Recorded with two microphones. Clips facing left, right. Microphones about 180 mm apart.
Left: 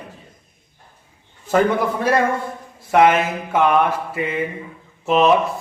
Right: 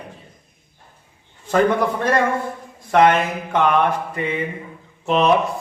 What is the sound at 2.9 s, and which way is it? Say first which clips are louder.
Speech: even; 5° left (ahead or behind).